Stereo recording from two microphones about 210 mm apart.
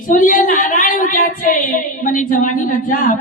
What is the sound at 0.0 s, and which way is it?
A woman's voice, 40° left (ahead or behind).